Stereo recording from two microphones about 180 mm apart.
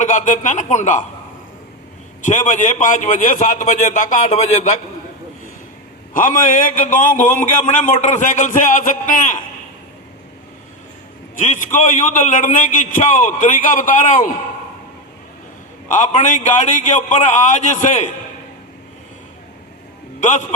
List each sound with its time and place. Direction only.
0.0 s a man's voice: 45° left (ahead or behind)
2.2 s a man's voice: 45° left (ahead or behind)
6.1 s a man's voice: 45° left (ahead or behind)
11.3 s a man's voice: 45° left (ahead or behind)
15.9 s a man's voice: 45° left (ahead or behind)
20.1 s a man's voice: 45° left (ahead or behind)